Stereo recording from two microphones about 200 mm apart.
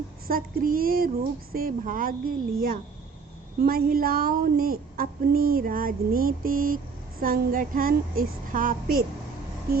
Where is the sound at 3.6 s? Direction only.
50° right (ahead or behind).